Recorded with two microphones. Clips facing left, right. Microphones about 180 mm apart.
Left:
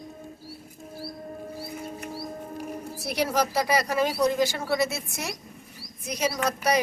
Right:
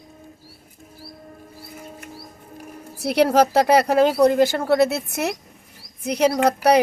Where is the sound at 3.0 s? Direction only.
65° right (ahead or behind).